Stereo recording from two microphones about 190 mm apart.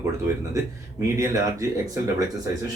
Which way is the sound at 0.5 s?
15° right (ahead or behind).